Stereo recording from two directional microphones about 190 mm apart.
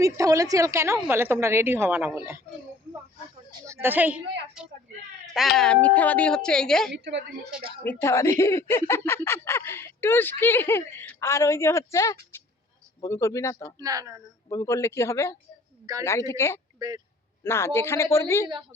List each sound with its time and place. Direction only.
0.0 s a woman's voice: 15° right (ahead or behind)
3.7 s a woman's voice: 10° right (ahead or behind)
5.5 s speech: 5° left (ahead or behind)
6.9 s a woman's voice: 65° right (ahead or behind)
7.9 s speech: 15° left (ahead or behind)
12.3 s a sound: 10° left (ahead or behind)
13.0 s speech: 15° left (ahead or behind)
13.7 s a woman's voice: 20° right (ahead or behind)
14.5 s speech: 15° left (ahead or behind)
16.8 s a woman's voice: 20° right (ahead or behind)
17.4 s speech: 15° left (ahead or behind)